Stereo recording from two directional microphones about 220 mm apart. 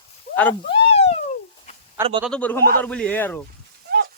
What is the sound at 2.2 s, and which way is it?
A man's voice, 5° left (ahead or behind).